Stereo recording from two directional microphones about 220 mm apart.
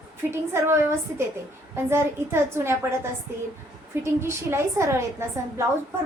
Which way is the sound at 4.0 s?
10° right (ahead or behind).